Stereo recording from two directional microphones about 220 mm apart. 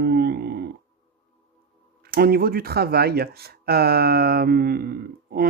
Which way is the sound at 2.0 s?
45° right (ahead or behind).